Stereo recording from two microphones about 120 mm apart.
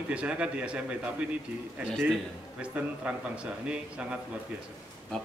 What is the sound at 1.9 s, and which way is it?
Speech, centre (ahead or behind).